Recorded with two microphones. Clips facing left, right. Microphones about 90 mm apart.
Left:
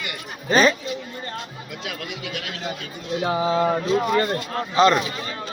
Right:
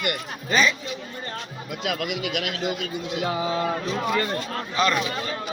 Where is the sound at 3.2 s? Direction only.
30° left (ahead or behind).